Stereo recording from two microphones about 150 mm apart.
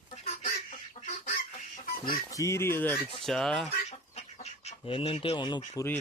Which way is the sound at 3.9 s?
45° left (ahead or behind).